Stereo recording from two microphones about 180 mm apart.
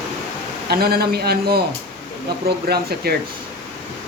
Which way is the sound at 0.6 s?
60° right (ahead or behind).